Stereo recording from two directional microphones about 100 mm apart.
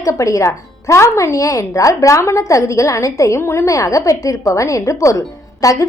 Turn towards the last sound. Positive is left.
turn(degrees=35)  # may be behind; listen again after turning